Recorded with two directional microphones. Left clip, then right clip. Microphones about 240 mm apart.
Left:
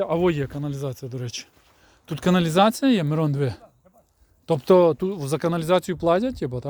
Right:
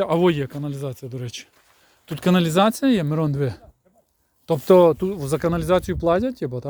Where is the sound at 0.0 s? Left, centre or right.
Right.